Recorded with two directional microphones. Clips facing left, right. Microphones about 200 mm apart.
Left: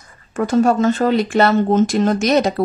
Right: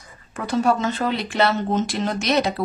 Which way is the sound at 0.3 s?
45° left (ahead or behind).